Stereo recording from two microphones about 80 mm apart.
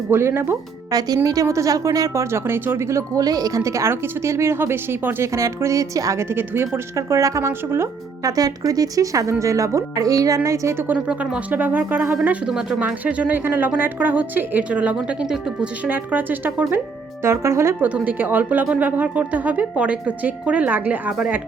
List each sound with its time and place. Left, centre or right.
0.1 s speech: right
0.9 s a woman's voice: right
2.3 s a woman's voice: right
3.2 s a woman's voice: right
6.3 s speech: right
6.9 s a woman's voice: right
8.2 s a woman's voice: right
11.1 s speech: centre
12.5 s speech: centre
12.8 s speech: centre
15.9 s speech: right
17.2 s a woman's voice: right
17.7 s speech: right